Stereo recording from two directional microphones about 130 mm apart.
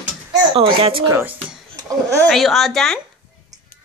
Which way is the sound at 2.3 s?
Centre (ahead or behind).